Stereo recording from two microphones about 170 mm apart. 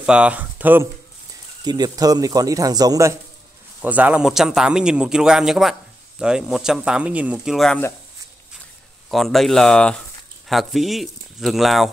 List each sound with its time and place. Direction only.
0.0 s speech: 5° right (ahead or behind)
1.6 s speech: 25° right (ahead or behind)
3.8 s a man's voice: 10° right (ahead or behind)
9.1 s a man's voice: centre (ahead or behind)